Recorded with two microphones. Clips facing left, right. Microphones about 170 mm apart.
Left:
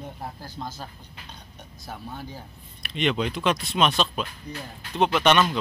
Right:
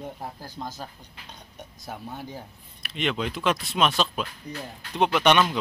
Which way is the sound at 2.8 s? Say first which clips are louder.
Left 3 dB; 5° right (ahead or behind).